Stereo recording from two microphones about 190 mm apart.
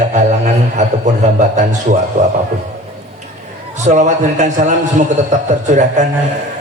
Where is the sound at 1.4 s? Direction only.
40° right (ahead or behind).